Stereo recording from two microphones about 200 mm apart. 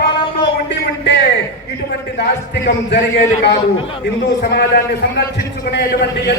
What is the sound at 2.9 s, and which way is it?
Speech, 60° left (ahead or behind).